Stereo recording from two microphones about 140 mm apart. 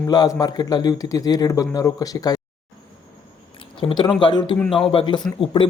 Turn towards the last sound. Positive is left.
turn(degrees=35)  # may be behind; listen again after turning